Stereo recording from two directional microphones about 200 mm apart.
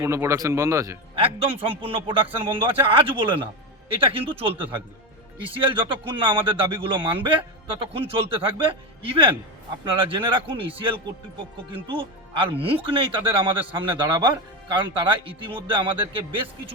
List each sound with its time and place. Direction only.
0.0 s speech: 15° right (ahead or behind)
1.1 s a man's voice: 25° right (ahead or behind)